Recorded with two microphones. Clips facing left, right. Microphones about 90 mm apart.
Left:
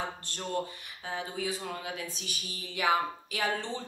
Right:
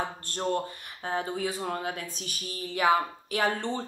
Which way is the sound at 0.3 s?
40° right (ahead or behind).